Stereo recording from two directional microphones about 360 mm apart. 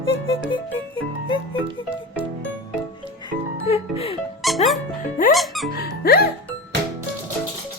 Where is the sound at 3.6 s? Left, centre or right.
Centre.